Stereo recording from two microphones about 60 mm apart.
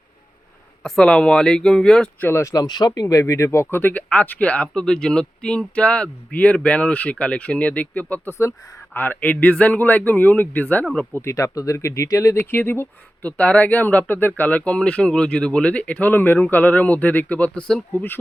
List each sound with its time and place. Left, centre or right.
0.8 s speech: centre
2.3 s speech: left
2.6 s speech: left
3.8 s speech: left
8.3 s speech: left
8.9 s speech: left
11.2 s speech: left
12.0 s speech: left
12.4 s speech: left
13.2 s speech: left
17.9 s speech: left